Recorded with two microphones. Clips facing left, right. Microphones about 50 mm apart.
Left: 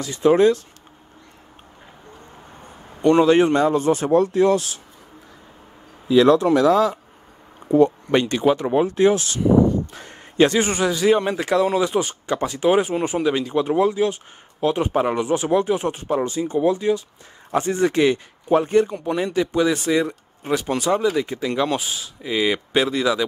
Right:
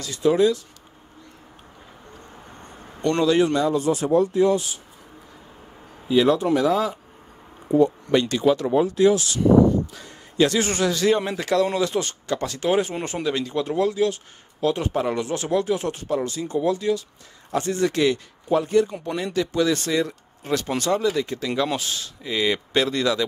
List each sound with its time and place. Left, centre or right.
0.0 s speech: left
3.0 s a man's voice: centre
3.3 s speech: left
6.1 s speech: left
7.7 s speech: left
8.1 s speech: left
9.9 s a sound: left
10.6 s speech: centre; by 18.9 s left
18.9 s speech: centre
19.1 s speech: centre